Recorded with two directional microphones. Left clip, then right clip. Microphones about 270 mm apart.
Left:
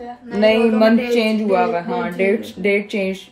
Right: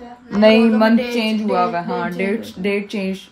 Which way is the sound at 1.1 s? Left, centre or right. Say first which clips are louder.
Left 3 dB; centre.